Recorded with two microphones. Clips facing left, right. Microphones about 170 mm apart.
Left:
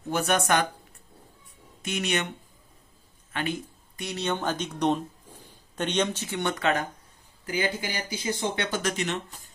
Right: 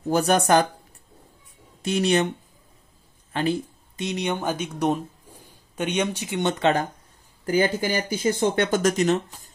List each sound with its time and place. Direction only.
0.1 s speech: 35° right (ahead or behind)
1.8 s speech: 35° right (ahead or behind)
3.3 s a sound: 35° right (ahead or behind)
4.0 s speech: 15° right (ahead or behind)
7.4 s speech: 45° right (ahead or behind)